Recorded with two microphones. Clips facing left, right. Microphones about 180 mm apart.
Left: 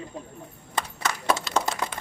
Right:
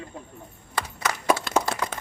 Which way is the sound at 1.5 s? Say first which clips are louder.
Right 2 dB; 55° right (ahead or behind).